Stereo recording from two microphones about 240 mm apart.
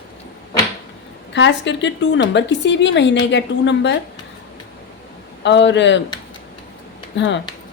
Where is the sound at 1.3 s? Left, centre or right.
Left.